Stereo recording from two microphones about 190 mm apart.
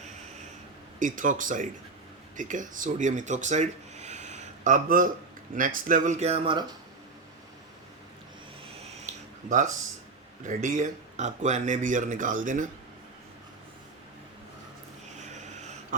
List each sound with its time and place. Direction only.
0.9 s speech: 45° right (ahead or behind); by 6.7 s 25° right (ahead or behind)
9.0 s a sound: 40° right (ahead or behind)
10.4 s speech: 40° right (ahead or behind)
15.9 s dog: 45° right (ahead or behind)